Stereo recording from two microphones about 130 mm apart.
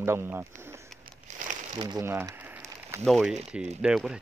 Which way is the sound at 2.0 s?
20° right (ahead or behind).